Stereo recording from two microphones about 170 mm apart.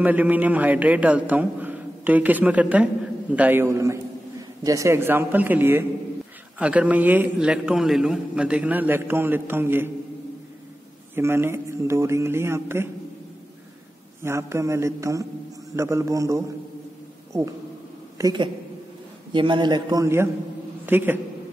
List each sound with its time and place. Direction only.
0.0 s a man's voice: 10° right (ahead or behind)
11.1 s a man's voice: 15° right (ahead or behind)
14.2 s a man's voice: 15° right (ahead or behind)
18.1 s a man's voice: 25° right (ahead or behind)